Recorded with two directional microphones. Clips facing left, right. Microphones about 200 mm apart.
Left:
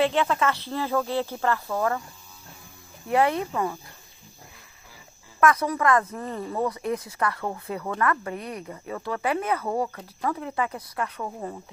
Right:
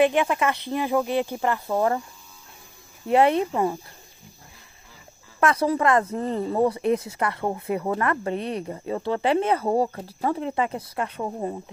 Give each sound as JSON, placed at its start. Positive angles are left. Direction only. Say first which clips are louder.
{"t": 0.0, "sound": "speech", "louder": "right 3 dB", "side_deg": -15}
{"t": 3.1, "sound": "speech", "louder": "right 4 dB", "side_deg": -25}
{"t": 5.4, "sound": "speech", "louder": "right 1 dB", "side_deg": -30}